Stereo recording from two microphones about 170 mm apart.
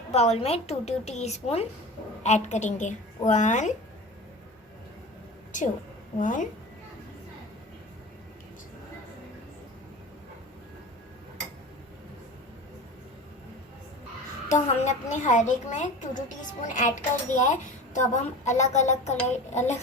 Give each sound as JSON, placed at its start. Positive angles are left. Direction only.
{"t": 0.1, "sound": "a woman's voice", "side_deg": 40}
{"t": 5.5, "sound": "a woman's voice", "side_deg": 50}
{"t": 14.5, "sound": "a woman's voice", "side_deg": 45}